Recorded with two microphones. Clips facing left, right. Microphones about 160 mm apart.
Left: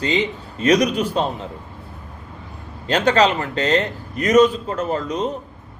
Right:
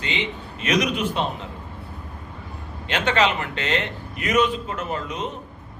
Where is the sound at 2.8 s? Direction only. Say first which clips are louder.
Left 5 dB; 35° left (ahead or behind).